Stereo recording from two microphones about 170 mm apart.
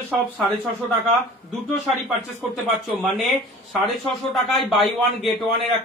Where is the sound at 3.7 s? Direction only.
Centre (ahead or behind).